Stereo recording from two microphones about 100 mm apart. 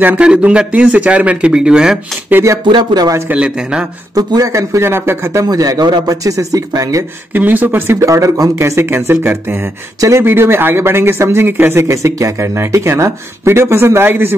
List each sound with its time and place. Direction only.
0.0 s speech: 15° right (ahead or behind)
2.3 s speech: 30° right (ahead or behind)
2.6 s speech: 50° right (ahead or behind)
3.3 s speech: 10° right (ahead or behind)
4.1 s speech: 40° right (ahead or behind)
5.5 s speech: 40° right (ahead or behind)
7.3 s speech: 20° right (ahead or behind)
9.9 s speech: 35° right (ahead or behind)
10.2 s speech: 25° right (ahead or behind)